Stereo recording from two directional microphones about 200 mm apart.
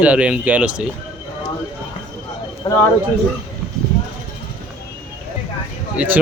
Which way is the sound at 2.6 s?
25° left (ahead or behind).